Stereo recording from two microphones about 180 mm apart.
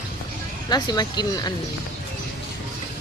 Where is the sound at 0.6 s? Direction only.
20° left (ahead or behind).